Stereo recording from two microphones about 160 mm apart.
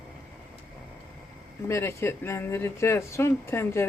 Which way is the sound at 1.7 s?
15° left (ahead or behind).